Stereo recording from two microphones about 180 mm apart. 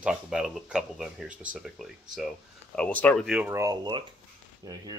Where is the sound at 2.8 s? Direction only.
10° left (ahead or behind).